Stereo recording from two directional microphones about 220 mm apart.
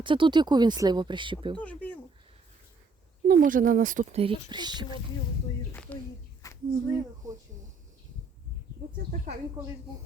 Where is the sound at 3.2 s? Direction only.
40° right (ahead or behind); by 4.9 s 20° right (ahead or behind).